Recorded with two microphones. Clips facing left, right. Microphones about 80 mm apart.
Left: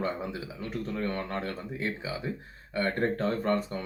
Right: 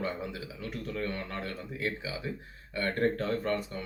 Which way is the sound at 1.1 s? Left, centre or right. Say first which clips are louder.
Left 4 dB; left.